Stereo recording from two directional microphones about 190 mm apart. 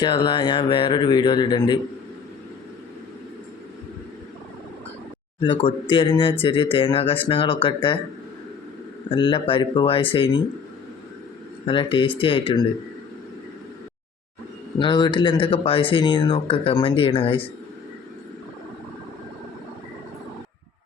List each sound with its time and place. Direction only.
0.0 s speech: 25° left (ahead or behind)
5.4 s speech: 25° left (ahead or behind)
9.0 s speech: 25° left (ahead or behind)
11.6 s speech: 25° left (ahead or behind)
14.8 s speech: 25° left (ahead or behind)